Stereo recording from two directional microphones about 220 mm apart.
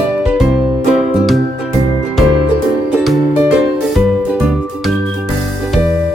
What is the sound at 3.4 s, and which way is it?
Music, 5° right (ahead or behind).